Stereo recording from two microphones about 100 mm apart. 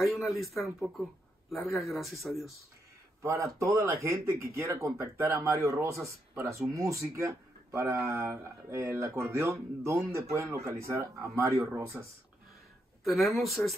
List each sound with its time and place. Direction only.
0.0 s a man's voice: centre (ahead or behind)
3.2 s speech: 30° right (ahead or behind)
13.0 s a man's voice: centre (ahead or behind)